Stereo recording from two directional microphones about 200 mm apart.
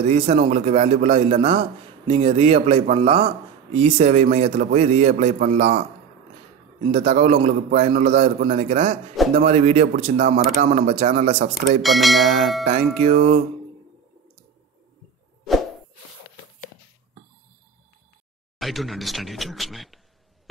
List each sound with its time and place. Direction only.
0.0 s a man's voice: 30° right (ahead or behind)
6.9 s a man's voice: 30° right (ahead or behind)
11.8 s speech: centre (ahead or behind)
12.6 s a man's voice: 35° right (ahead or behind)
18.6 s speech: centre (ahead or behind)